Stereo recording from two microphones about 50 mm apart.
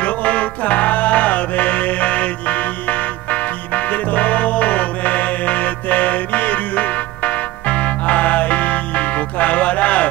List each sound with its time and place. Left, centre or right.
0.0 s music: left